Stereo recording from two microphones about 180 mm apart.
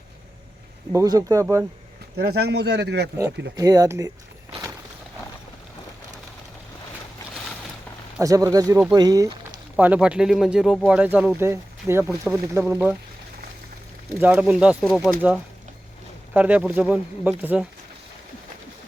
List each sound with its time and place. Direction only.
0.9 s speech: 20° right (ahead or behind)
2.1 s speech: 60° right (ahead or behind)
3.5 s speech: 20° right (ahead or behind)
8.2 s speech: 20° right (ahead or behind)
9.7 s speech: 5° right (ahead or behind)
14.2 s speech: 10° right (ahead or behind)
16.3 s speech: 10° right (ahead or behind)